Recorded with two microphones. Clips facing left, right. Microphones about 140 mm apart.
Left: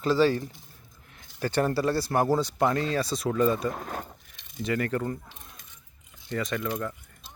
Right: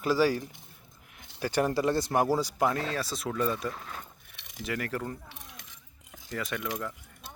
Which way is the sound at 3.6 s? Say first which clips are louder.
Left 5 dB; 50° left (ahead or behind).